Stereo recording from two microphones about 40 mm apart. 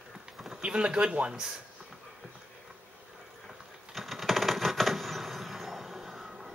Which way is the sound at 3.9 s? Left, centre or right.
Centre.